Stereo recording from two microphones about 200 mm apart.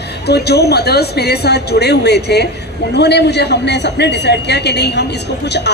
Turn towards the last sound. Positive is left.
turn(degrees=55)  # may be behind; listen again after turning